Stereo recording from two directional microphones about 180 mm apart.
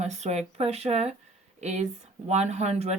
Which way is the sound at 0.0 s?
40° right (ahead or behind).